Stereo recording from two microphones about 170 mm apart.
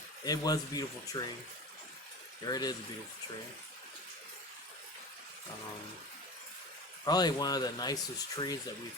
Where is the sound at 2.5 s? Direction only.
25° left (ahead or behind).